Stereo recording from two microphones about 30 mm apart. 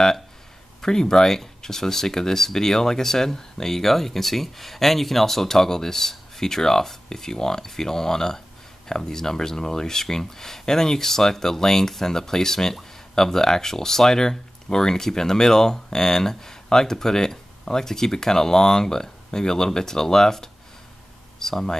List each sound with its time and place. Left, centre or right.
0.7 s speech: left